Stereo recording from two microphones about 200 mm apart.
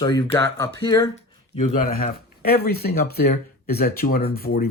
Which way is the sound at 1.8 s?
50° left (ahead or behind).